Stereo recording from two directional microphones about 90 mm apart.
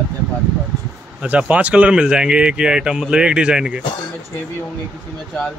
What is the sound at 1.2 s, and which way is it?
Speech, 15° right (ahead or behind).